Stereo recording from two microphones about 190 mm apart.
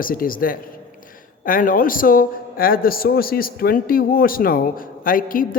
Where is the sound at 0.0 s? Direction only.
50° left (ahead or behind).